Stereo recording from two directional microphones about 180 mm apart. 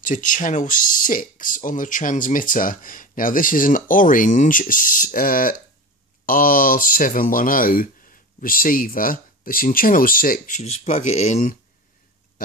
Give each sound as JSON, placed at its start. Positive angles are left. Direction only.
{"t": 0.0, "sound": "speech", "side_deg": 45}
{"t": 12.4, "sound": "speech", "side_deg": 55}